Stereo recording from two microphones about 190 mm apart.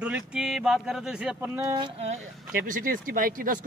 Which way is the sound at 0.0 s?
5° right (ahead or behind).